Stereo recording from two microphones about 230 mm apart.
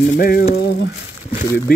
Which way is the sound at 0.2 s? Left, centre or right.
Left.